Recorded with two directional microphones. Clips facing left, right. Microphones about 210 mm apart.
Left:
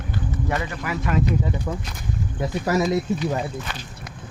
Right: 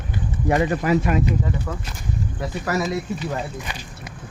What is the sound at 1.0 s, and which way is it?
Speech, 10° right (ahead or behind).